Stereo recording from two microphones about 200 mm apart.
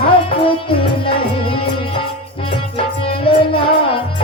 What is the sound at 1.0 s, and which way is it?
Music, 25° left (ahead or behind).